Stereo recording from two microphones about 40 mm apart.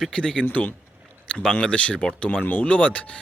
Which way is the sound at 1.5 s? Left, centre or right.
Left.